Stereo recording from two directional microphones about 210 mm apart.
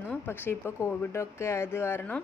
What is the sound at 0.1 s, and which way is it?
Speech, 10° left (ahead or behind).